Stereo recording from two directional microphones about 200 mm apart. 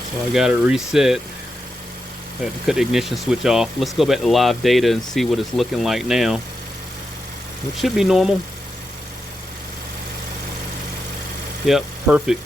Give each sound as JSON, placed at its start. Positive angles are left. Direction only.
{"t": 0.3, "sound": "speech", "side_deg": -5}
{"t": 2.4, "sound": "speech", "side_deg": 0}
{"t": 7.8, "sound": "speech", "side_deg": 0}
{"t": 11.6, "sound": "speech", "side_deg": -5}